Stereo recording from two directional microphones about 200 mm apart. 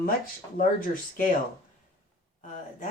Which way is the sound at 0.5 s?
40° left (ahead or behind).